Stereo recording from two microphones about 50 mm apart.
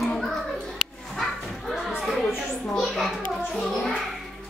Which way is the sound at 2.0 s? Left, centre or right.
Centre.